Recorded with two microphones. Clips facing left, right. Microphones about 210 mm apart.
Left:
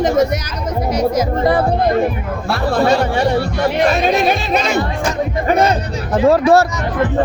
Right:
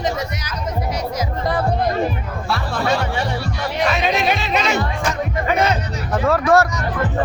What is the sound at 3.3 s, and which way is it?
Music, 55° left (ahead or behind).